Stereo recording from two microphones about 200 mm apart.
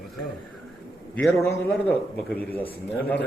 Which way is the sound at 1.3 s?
15° left (ahead or behind).